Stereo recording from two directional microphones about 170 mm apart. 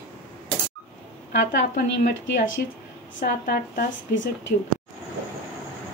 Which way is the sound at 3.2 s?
65° left (ahead or behind).